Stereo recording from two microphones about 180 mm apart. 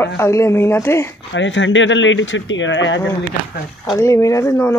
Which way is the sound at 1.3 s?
90° left.